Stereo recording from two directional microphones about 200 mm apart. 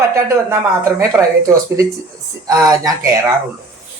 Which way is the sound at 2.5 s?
15° right (ahead or behind).